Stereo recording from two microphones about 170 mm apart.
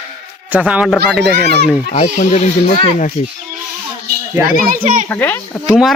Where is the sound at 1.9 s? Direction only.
40° left (ahead or behind).